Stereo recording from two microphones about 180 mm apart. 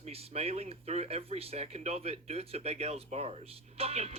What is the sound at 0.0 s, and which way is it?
Music, 35° right (ahead or behind).